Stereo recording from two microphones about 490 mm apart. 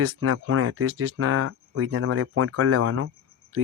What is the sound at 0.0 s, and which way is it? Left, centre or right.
Speech, right.